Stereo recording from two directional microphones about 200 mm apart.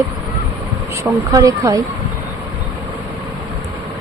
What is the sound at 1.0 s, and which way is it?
Speech, 15° right (ahead or behind).